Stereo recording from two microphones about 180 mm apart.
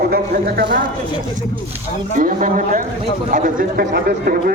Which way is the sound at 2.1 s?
45° right (ahead or behind).